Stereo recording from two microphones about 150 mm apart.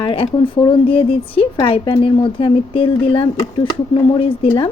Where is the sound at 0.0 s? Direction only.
35° left (ahead or behind).